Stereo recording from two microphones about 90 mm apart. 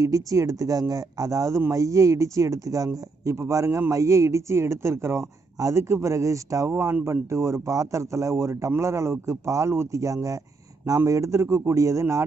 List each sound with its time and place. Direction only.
0.0 s a man's voice: 40° right (ahead or behind)